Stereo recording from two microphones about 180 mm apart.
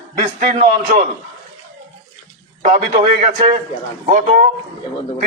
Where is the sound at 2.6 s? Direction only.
45° right (ahead or behind).